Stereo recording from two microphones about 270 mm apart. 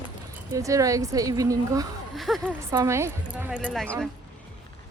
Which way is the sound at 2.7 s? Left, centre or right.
Centre.